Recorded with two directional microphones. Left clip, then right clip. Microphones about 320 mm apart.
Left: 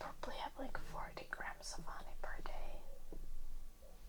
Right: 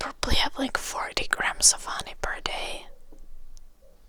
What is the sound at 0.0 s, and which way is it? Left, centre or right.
Speech, right.